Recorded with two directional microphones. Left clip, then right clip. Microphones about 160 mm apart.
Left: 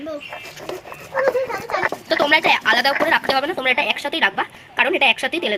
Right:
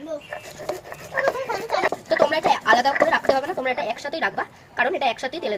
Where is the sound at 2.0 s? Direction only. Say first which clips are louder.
Left 4 dB; centre (ahead or behind).